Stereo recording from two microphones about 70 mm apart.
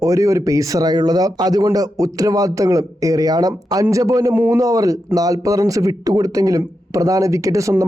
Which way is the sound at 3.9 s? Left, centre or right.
Right.